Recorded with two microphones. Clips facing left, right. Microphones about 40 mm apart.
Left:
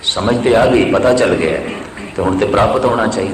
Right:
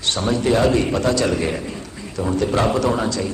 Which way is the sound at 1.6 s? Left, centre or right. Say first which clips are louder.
Left 8 dB; left.